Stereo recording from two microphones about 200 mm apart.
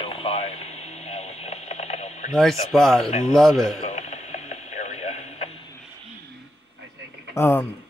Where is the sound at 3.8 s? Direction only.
35° left (ahead or behind).